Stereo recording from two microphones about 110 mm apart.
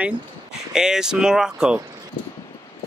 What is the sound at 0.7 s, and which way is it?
Speech, 5° right (ahead or behind).